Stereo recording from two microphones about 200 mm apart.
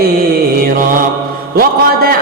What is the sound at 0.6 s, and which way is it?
A man's voice, 45° right (ahead or behind).